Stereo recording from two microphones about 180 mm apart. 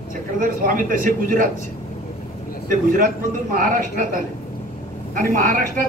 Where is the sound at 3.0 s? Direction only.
50° right (ahead or behind).